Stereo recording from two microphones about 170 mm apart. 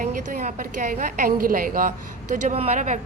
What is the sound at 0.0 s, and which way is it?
A woman's voice, 50° right (ahead or behind).